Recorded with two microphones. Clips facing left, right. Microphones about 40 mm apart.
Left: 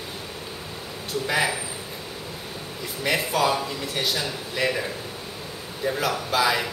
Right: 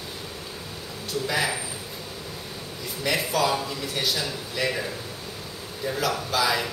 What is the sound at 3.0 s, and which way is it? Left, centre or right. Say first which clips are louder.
A man's voice: left 2 dB; centre.